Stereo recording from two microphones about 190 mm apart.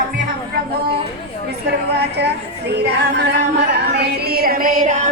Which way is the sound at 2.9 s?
60° right (ahead or behind).